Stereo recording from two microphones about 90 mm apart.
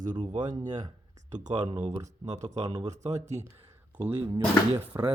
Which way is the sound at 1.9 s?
40° right (ahead or behind).